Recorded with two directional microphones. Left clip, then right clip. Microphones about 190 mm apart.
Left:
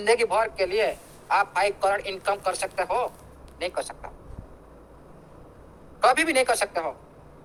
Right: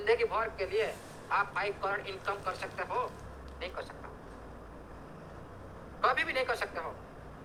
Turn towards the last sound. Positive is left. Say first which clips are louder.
# left 10 dB
turn(degrees=55)  # may be behind; listen again after turning